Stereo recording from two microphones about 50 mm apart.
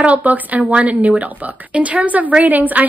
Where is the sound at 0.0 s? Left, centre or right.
Right.